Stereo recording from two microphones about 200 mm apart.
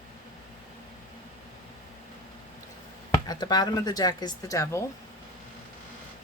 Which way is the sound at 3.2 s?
20° left (ahead or behind).